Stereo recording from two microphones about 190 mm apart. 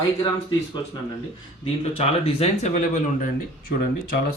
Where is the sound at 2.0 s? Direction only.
35° left (ahead or behind).